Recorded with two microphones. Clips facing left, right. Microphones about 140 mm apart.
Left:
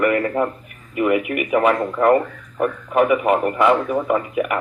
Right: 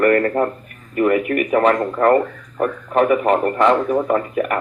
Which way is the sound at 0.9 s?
45° right (ahead or behind).